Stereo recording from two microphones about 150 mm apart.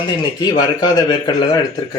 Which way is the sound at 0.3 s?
25° left (ahead or behind).